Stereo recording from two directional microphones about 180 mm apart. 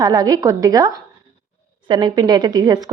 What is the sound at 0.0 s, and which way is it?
A woman's voice, 20° right (ahead or behind).